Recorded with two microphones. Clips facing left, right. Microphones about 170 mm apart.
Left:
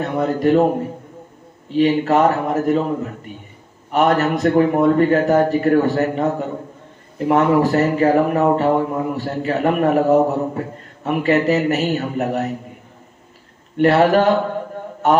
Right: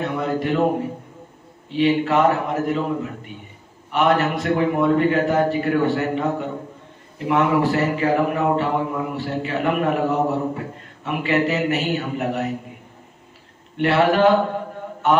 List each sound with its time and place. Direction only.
0.0 s a man's voice: 40° left (ahead or behind)
1.8 s speech: 40° left (ahead or behind)
3.9 s speech: 40° left (ahead or behind)
13.7 s speech: 40° left (ahead or behind)